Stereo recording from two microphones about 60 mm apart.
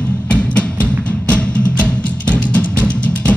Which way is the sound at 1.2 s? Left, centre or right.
Left.